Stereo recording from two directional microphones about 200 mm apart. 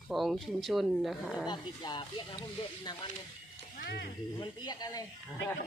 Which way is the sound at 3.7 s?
50° left (ahead or behind).